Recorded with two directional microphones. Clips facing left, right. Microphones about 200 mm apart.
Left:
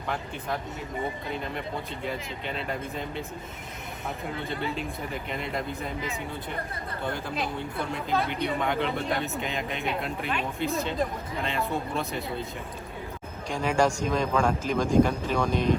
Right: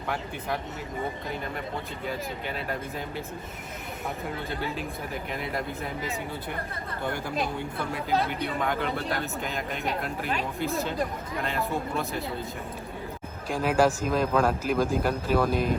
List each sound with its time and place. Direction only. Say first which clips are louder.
0.1 s speech: even; 5° right (ahead or behind)
2.0 s speech: right 2 dB; 5° right (ahead or behind)
4.4 s speech: left 1 dB; centre (ahead or behind)
8.4 s speech: left 1 dB; centre (ahead or behind)
10.2 s speech: right 1 dB; 45° right (ahead or behind)
10.7 s speech: left 2 dB; centre (ahead or behind)
13.5 s speech: right 2 dB; 5° right (ahead or behind)